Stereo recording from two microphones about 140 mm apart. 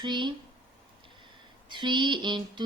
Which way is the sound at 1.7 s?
35° right (ahead or behind).